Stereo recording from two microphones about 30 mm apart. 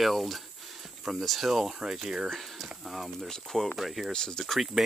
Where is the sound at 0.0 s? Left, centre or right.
Centre; by 2.2 s right.